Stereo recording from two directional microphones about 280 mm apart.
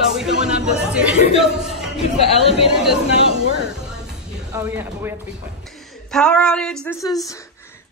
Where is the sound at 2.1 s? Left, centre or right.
Left.